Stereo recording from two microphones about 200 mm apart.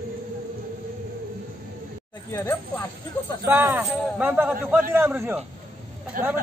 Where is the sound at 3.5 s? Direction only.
10° right (ahead or behind).